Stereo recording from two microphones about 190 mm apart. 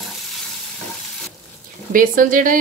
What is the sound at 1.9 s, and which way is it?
Speech, 45° right (ahead or behind).